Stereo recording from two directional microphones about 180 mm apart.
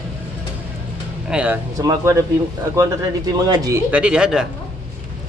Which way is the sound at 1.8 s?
15° right (ahead or behind).